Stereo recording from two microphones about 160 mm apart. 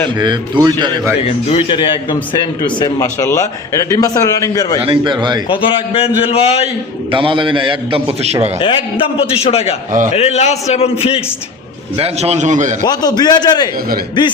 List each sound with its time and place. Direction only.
0.2 s a man's voice: 30° right (ahead or behind)
1.5 s a man's voice: 30° left (ahead or behind)
4.8 s a man's voice: 30° right (ahead or behind)
5.5 s a man's voice: 35° left (ahead or behind)
7.1 s a man's voice: 30° right (ahead or behind)
8.5 s a man's voice: 35° left (ahead or behind)
11.9 s a man's voice: 40° right (ahead or behind)
12.9 s a man's voice: 25° left (ahead or behind)